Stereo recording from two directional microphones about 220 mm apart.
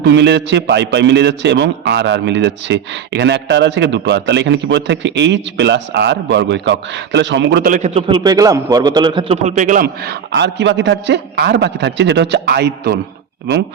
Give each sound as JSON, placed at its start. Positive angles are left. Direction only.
{"t": 0.0, "sound": "a man's voice", "side_deg": -50}